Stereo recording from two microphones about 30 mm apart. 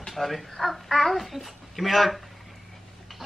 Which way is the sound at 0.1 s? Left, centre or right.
Centre.